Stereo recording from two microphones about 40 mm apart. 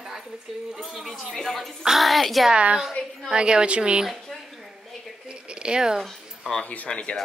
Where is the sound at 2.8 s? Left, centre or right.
Centre.